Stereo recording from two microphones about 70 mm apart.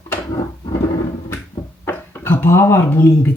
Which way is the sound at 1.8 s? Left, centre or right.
Left.